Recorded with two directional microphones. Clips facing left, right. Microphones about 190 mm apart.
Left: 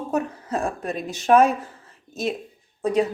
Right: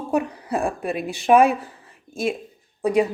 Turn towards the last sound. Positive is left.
turn(degrees=-10)  # may be behind; listen again after turning